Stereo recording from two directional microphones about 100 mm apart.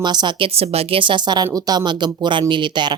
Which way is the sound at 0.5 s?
80° right.